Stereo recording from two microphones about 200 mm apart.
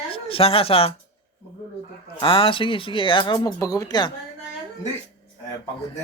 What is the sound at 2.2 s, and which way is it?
Speech, 25° left (ahead or behind).